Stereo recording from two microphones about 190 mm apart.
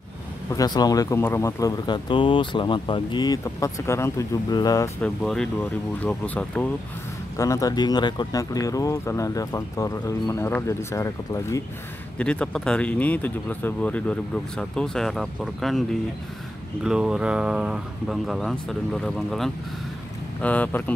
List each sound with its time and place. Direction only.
0.5 s speech: 20° left (ahead or behind)
5.0 s speech: 5° left (ahead or behind)
12.2 s speech: 5° left (ahead or behind)